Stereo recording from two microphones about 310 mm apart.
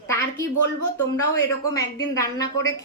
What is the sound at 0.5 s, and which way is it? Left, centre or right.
Speech, left.